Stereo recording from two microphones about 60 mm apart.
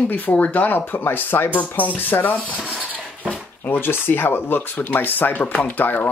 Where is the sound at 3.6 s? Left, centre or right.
Left.